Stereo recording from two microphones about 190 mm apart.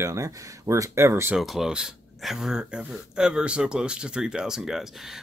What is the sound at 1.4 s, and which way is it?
Speech, centre (ahead or behind).